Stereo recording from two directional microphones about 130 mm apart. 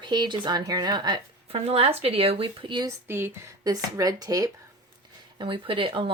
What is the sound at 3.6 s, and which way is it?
Speech, 30° right (ahead or behind).